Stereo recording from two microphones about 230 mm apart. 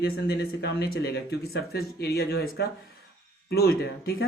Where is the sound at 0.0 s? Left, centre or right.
Left.